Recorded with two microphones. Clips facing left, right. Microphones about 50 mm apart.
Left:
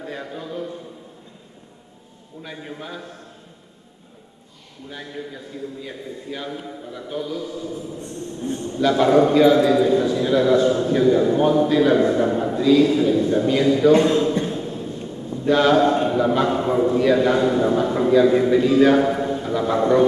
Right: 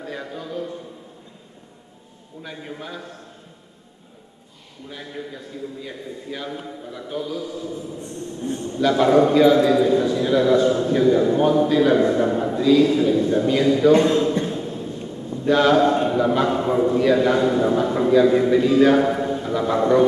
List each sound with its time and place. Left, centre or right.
0.0 s a sound: centre
2.4 s a man's voice: centre
4.8 s a man's voice: centre